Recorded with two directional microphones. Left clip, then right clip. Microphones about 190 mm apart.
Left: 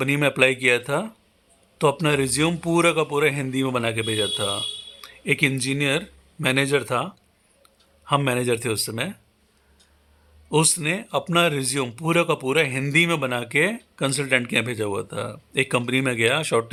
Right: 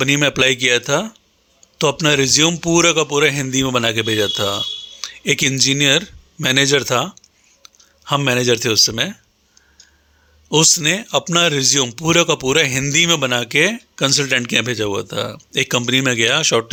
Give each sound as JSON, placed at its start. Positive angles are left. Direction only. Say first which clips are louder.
{"t": 0.0, "sound": "a man's voice", "louder": "right 4 dB", "side_deg": -15}
{"t": 10.5, "sound": "speech", "louder": "right 7 dB", "side_deg": -20}